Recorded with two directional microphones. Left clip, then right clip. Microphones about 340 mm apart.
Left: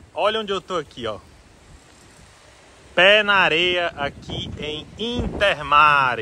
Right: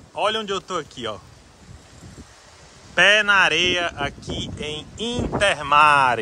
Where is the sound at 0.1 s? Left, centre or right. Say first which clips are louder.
Left 1 dB; centre.